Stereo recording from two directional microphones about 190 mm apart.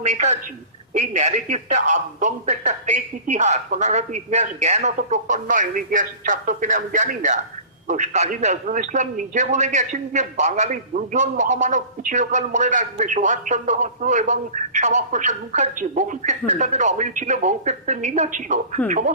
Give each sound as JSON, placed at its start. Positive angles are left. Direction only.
{"t": 0.0, "sound": "a man's voice", "side_deg": -40}